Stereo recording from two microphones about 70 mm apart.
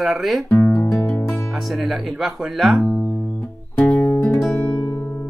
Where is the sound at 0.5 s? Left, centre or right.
Left.